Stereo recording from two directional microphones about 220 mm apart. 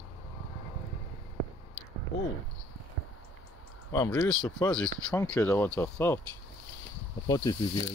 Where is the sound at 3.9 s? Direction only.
15° left (ahead or behind).